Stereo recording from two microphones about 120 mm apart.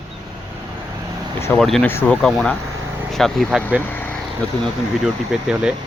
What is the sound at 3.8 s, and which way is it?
Vehicle, 15° left (ahead or behind).